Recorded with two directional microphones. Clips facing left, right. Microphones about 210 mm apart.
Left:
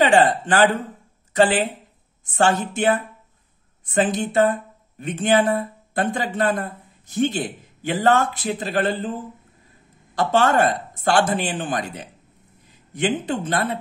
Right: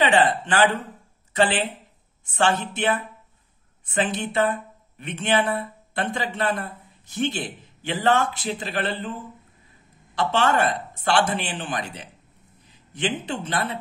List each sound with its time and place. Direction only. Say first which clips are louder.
0.0 s speech: left 3 dB; 45° left (ahead or behind)
10.1 s speech: left 3 dB; 45° left (ahead or behind)